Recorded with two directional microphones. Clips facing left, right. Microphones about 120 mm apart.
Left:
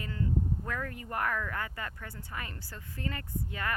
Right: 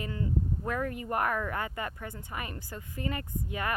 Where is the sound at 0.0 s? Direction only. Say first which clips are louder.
Right 1 dB; 20° right (ahead or behind).